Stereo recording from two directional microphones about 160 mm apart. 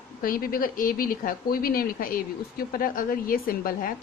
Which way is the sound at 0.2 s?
65° left (ahead or behind).